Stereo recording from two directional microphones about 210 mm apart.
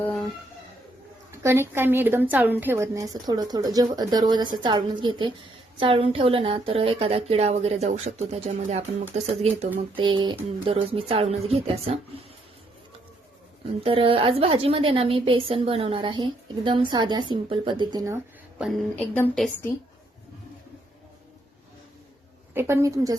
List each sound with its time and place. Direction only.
1.3 s a woman's voice: 10° right (ahead or behind); by 11.9 s 25° right (ahead or behind)
13.8 s a woman's voice: 25° right (ahead or behind)
18.6 s a woman's voice: 10° left (ahead or behind)
22.5 s a woman's voice: 10° right (ahead or behind)